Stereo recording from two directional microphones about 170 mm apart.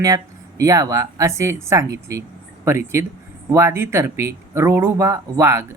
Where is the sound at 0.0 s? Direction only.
20° right (ahead or behind).